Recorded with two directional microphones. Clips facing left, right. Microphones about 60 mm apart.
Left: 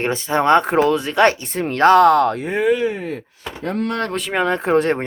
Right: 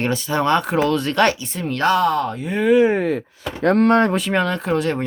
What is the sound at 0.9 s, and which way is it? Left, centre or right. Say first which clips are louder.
Speech: left 1 dB; centre.